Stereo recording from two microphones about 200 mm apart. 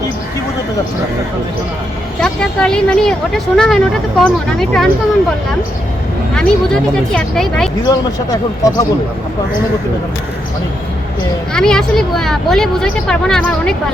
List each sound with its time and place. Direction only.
2.2 s speech: 5° left (ahead or behind)
6.3 s speech: 5° left (ahead or behind)
7.9 s speech: 15° left (ahead or behind)
11.5 s speech: 5° left (ahead or behind)